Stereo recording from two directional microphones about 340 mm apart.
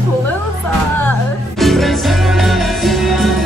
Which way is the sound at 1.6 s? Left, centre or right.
Centre.